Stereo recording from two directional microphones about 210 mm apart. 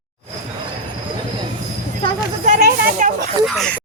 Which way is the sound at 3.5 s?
Centre (ahead or behind).